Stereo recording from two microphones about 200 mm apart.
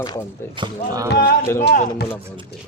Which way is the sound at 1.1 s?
55° left (ahead or behind).